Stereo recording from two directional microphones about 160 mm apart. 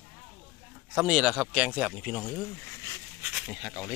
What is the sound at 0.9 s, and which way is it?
Speech, 5° right (ahead or behind).